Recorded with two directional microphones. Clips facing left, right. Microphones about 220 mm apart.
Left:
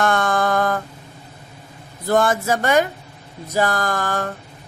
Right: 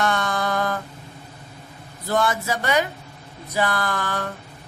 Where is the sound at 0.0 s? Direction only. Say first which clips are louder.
Left 4 dB; 50° left (ahead or behind).